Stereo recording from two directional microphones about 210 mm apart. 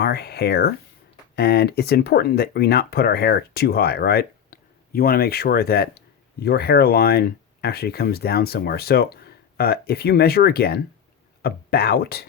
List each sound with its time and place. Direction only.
0.0 s speech: 50° left (ahead or behind)